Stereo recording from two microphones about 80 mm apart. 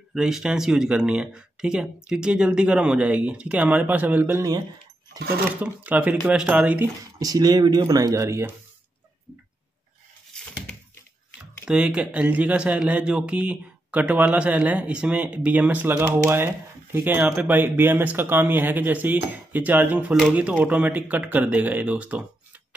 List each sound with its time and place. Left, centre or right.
0.1 s speech: centre; by 4.5 s right
5.6 s speech: centre
7.2 s speech: right
11.6 s speech: centre